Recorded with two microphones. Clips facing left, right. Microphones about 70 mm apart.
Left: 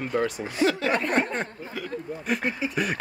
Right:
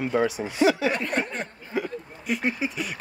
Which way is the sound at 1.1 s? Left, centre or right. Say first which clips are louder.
Left 3 dB; left.